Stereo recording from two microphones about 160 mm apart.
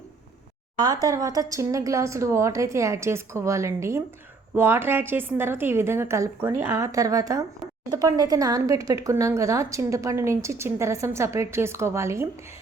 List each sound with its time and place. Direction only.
0.8 s a woman's voice: 25° right (ahead or behind)